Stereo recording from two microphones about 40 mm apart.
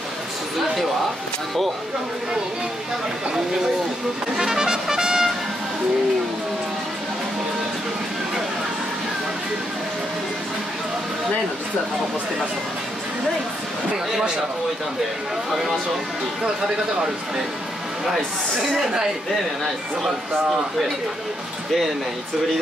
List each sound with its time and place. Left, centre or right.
4.4 s music: centre
18.0 s speech: centre
18.8 s speech: centre